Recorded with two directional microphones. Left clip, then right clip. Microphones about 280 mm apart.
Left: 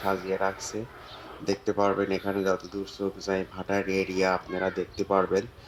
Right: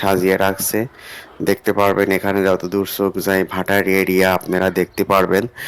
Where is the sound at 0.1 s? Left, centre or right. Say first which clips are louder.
Right 11 dB; right.